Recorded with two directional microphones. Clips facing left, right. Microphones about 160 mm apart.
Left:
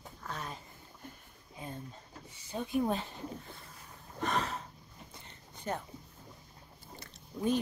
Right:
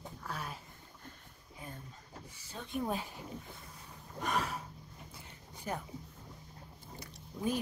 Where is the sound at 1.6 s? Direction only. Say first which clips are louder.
Left 4 dB; 20° left (ahead or behind).